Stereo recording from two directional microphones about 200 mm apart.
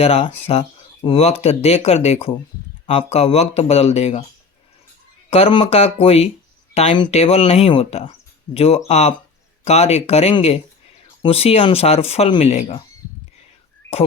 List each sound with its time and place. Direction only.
0.0 s speech: 30° left (ahead or behind)
5.3 s speech: 25° left (ahead or behind)